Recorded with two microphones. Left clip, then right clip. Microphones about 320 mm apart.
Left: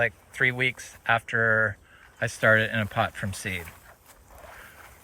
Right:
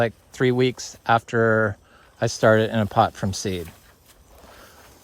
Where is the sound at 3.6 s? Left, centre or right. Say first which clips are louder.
Left 1 dB; centre.